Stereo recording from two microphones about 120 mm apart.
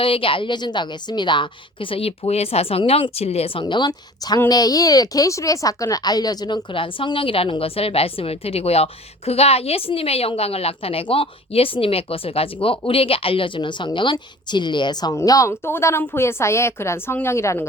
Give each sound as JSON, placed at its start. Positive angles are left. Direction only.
{"t": 0.0, "sound": "speech", "side_deg": 50}
{"t": 3.6, "sound": "a woman's voice", "side_deg": 40}